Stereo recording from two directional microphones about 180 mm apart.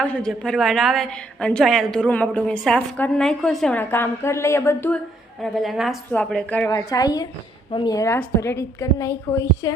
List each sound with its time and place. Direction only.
0.0 s a woman's voice: 5° left (ahead or behind)
5.4 s a woman's voice: centre (ahead or behind)
6.7 s a woman's voice: 20° left (ahead or behind)